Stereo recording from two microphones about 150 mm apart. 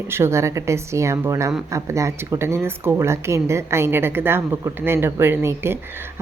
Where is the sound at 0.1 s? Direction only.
15° right (ahead or behind).